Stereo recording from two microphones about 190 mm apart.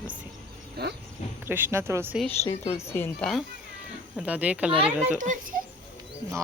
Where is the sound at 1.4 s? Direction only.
10° right (ahead or behind).